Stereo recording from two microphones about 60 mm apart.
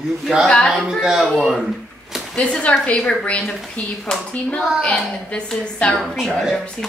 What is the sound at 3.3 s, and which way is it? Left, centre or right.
A child's voice, left.